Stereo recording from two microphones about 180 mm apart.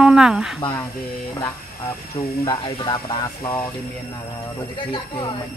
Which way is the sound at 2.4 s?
25° left (ahead or behind).